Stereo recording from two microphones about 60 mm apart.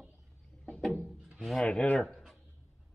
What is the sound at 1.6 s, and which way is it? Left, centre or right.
Speech, centre.